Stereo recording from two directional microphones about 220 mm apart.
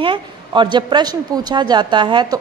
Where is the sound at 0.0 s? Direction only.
20° right (ahead or behind).